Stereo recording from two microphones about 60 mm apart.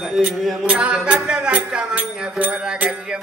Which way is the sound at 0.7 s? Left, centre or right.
Right.